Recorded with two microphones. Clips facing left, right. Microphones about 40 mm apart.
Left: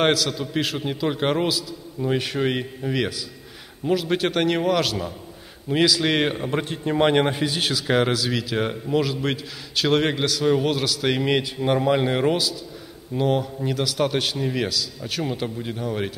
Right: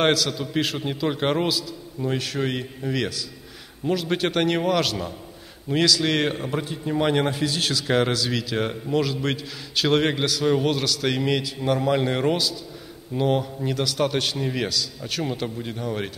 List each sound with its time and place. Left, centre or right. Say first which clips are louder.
0.0 s a man's voice: even; centre
2.1 s a man's voice: left 4 dB; centre
5.7 s a man's voice: left 1 dB; centre
6.6 s a man's voice: left 2 dB; left
6.9 s a man's voice: left 3 dB; left; by 16.1 s centre